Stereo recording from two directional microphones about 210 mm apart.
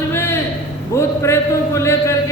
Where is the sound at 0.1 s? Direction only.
10° left (ahead or behind).